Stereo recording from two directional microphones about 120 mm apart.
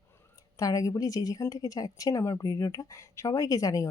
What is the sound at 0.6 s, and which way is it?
A woman's voice, 30° left (ahead or behind).